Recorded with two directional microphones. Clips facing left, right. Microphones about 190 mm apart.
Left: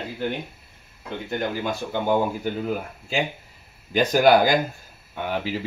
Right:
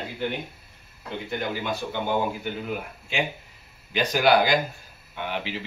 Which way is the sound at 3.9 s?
45° left (ahead or behind).